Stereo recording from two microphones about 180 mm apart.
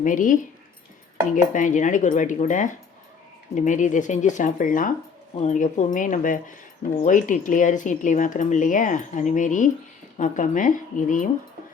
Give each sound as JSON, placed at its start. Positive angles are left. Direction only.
{"t": 0.0, "sound": "speech", "side_deg": 45}
{"t": 1.5, "sound": "speech", "side_deg": 45}